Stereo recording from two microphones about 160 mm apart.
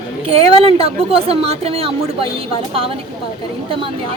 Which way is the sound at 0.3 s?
35° right (ahead or behind).